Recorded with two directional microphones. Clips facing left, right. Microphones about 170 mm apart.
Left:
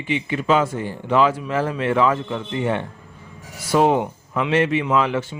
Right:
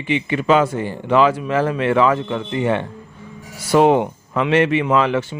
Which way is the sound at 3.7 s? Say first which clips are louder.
Right 4 dB; 70° right (ahead or behind).